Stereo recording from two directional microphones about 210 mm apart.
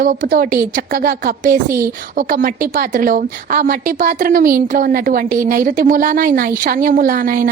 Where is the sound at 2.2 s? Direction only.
40° right (ahead or behind).